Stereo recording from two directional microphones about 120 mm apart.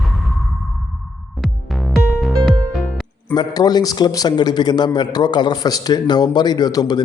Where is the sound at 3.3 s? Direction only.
35° left (ahead or behind).